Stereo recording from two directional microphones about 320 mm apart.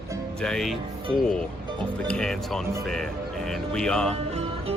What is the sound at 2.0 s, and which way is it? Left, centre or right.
Speech, centre.